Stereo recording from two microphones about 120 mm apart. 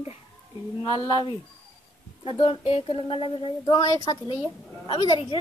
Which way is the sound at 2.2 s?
50° left (ahead or behind).